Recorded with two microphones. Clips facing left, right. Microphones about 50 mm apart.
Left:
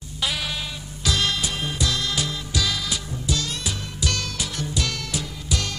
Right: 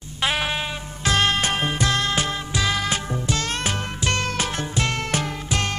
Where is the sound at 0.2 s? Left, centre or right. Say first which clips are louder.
Right 5 dB; right.